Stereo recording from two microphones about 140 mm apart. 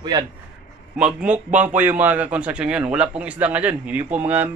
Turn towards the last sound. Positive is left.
turn(degrees=-10)  # may be behind; listen again after turning